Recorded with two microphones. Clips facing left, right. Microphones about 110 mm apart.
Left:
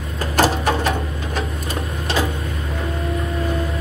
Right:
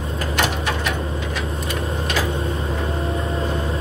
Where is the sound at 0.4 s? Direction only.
40° left (ahead or behind).